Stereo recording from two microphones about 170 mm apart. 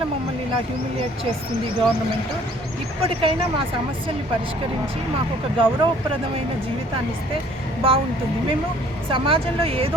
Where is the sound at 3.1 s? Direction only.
30° right (ahead or behind).